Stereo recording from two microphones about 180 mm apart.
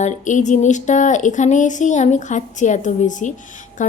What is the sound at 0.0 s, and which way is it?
A woman's voice, 40° left (ahead or behind).